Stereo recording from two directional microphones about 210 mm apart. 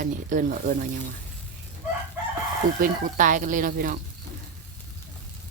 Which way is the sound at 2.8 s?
40° right (ahead or behind).